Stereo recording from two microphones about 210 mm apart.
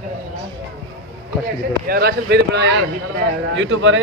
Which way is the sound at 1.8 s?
50° right (ahead or behind).